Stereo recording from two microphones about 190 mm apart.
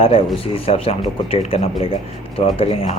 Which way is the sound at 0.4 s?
30° left (ahead or behind).